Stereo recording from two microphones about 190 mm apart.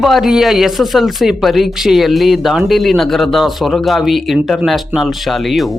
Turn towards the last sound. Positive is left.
turn(degrees=0)  # may be behind; listen again after turning